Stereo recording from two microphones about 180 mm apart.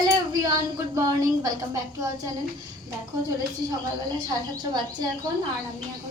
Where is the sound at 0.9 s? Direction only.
20° right (ahead or behind).